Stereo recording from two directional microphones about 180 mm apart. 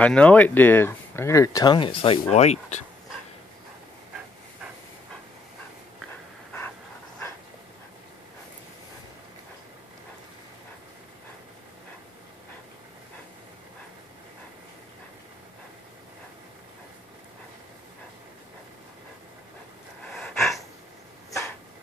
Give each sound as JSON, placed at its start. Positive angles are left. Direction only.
{"t": 0.0, "sound": "speech", "side_deg": 5}
{"t": 20.1, "sound": "gasp", "side_deg": 0}